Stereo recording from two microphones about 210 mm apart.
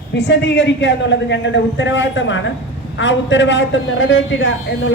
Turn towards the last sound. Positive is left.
turn(degrees=65)  # may be behind; listen again after turning